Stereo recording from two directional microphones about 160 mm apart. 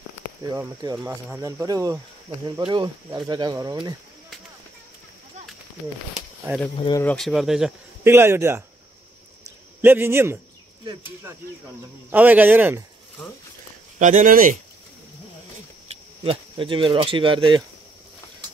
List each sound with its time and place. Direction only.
0.4 s speech: 20° right (ahead or behind)
0.9 s speech: 10° right (ahead or behind)
1.4 s speech: 20° right (ahead or behind)
7.0 s speech: 5° left (ahead or behind)
8.0 s speech: 15° right (ahead or behind)
9.8 s speech: 15° right (ahead or behind)
12.1 s speech: 10° right (ahead or behind)
13.9 s speech: 50° right (ahead or behind)
16.3 s speech: 30° right (ahead or behind)